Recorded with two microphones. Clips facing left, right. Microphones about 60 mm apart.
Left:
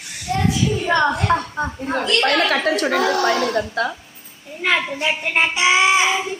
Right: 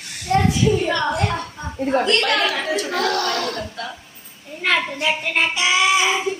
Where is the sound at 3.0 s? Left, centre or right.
Centre.